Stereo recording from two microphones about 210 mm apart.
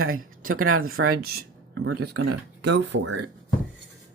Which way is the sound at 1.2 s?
45° right (ahead or behind).